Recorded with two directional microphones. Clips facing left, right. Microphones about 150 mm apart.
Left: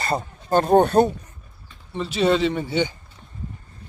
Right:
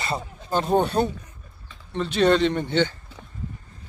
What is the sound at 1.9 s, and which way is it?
Speech, 5° left (ahead or behind).